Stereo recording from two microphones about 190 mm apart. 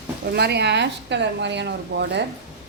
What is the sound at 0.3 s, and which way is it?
A woman's voice, 60° right (ahead or behind).